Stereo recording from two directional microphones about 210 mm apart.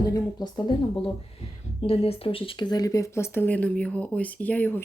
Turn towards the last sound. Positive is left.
turn(degrees=5)  # may be behind; listen again after turning